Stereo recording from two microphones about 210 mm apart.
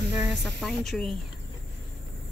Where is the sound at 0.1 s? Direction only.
Centre (ahead or behind).